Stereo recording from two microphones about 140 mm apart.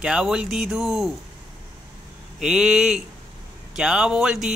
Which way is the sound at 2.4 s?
5° right (ahead or behind).